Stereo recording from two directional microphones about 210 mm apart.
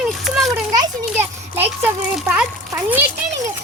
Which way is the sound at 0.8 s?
10° right (ahead or behind).